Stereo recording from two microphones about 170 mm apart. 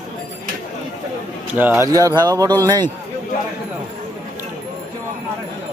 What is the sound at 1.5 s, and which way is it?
Speech, 10° right (ahead or behind).